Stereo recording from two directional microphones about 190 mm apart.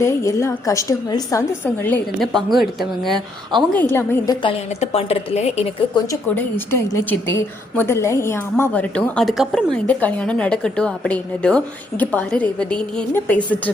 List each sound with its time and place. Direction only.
0.0 s a woman's voice: 15° left (ahead or behind)
3.8 s a woman's voice: 10° left (ahead or behind)
4.4 s a woman's voice: 30° left (ahead or behind)
6.1 s a woman's voice: 15° left (ahead or behind)